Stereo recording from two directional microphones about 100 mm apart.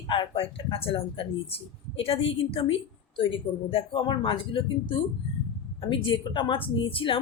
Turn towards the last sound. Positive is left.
turn(degrees=60)  # may be behind; listen again after turning